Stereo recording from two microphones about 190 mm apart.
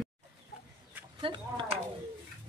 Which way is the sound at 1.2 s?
25° right (ahead or behind).